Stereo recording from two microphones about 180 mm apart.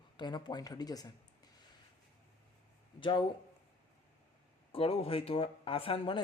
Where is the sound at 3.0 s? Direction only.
25° left (ahead or behind).